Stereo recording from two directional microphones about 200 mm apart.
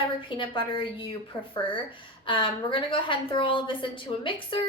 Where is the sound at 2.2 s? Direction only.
25° left (ahead or behind).